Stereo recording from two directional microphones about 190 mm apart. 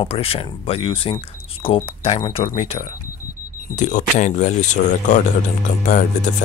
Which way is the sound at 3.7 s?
40° left (ahead or behind).